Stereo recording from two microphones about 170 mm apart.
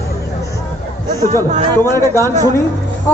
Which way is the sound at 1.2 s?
45° right (ahead or behind).